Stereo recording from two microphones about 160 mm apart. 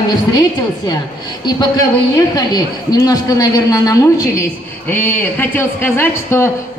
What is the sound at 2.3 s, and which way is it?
A man's voice, 25° left (ahead or behind).